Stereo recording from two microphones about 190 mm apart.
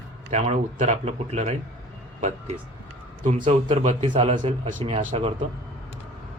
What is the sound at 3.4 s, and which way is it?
Speech, 35° right (ahead or behind).